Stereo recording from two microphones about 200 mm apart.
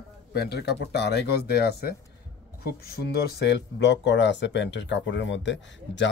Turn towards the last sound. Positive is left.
turn(degrees=65)  # may be behind; listen again after turning